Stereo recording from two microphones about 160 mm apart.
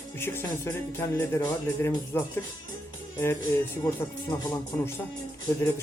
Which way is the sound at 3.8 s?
20° left (ahead or behind).